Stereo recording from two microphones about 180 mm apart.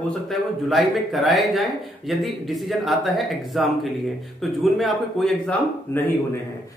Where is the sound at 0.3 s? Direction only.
Centre (ahead or behind).